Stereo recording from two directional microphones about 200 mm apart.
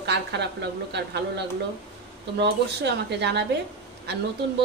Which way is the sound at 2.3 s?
55° right (ahead or behind).